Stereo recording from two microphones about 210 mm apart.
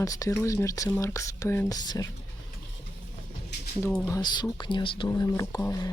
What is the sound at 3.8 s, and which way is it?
Speech, 10° left (ahead or behind).